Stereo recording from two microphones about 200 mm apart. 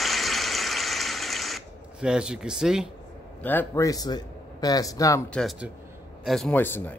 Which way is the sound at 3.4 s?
10° left (ahead or behind).